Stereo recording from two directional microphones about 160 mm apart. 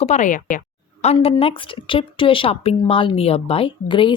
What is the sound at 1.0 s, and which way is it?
Speech, 40° left (ahead or behind).